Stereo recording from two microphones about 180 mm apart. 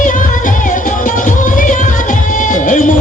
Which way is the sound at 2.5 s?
45° left (ahead or behind).